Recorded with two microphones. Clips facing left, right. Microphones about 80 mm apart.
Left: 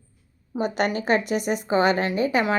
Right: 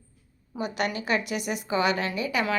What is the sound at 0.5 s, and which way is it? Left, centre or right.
A woman's voice, left.